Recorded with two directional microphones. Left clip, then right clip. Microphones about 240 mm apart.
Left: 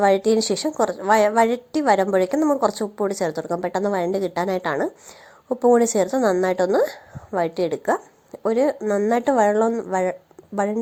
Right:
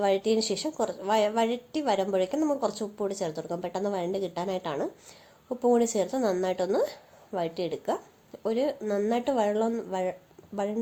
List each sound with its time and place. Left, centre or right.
0.0 s a woman's voice: left